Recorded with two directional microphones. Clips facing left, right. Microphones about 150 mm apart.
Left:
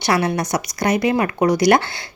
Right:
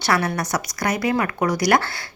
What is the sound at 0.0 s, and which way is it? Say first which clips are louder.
Speech: left 3 dB; 20° left (ahead or behind).